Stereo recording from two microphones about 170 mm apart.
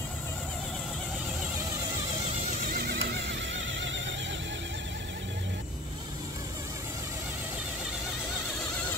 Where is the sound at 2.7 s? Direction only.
70° right (ahead or behind); by 4.4 s 90° right.